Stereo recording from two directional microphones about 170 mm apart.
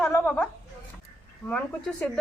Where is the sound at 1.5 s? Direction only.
5° left (ahead or behind).